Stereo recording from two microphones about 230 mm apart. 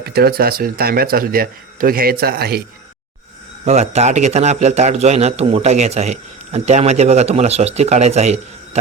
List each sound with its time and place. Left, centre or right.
0.0 s speech: right
3.7 s a man's voice: right